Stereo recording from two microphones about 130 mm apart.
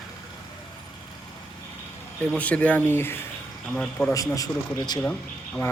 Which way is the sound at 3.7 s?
Centre (ahead or behind).